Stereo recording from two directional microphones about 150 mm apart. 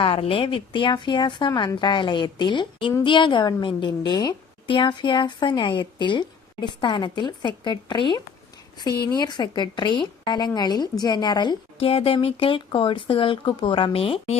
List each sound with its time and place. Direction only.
0.0 s a woman's voice: 35° left (ahead or behind)